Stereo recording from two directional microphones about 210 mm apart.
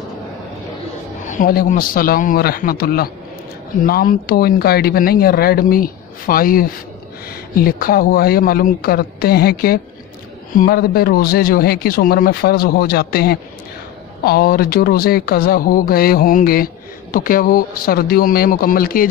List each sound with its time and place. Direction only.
1.3 s speech: 40° left (ahead or behind)